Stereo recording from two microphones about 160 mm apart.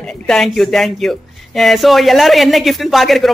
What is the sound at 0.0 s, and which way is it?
Speech, 5° left (ahead or behind).